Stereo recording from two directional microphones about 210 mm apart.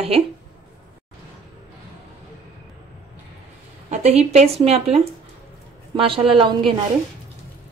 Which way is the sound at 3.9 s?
30° right (ahead or behind).